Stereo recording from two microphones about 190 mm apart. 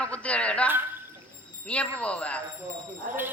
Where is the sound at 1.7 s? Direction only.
5° left (ahead or behind).